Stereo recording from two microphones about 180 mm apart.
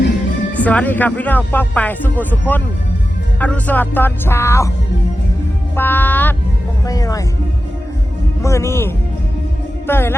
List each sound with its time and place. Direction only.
0.5 s speech: 10° left (ahead or behind)
5.7 s music: 10° left (ahead or behind)
8.4 s speech: 15° left (ahead or behind)
9.8 s music: 10° left (ahead or behind)